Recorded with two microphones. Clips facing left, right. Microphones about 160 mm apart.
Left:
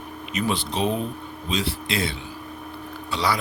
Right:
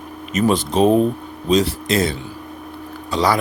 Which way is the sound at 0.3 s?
45° right (ahead or behind).